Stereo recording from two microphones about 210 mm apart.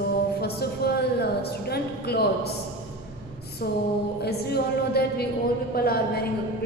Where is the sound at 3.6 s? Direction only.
50° left (ahead or behind).